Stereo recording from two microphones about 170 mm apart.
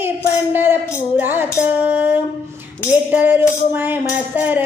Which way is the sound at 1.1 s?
10° right (ahead or behind).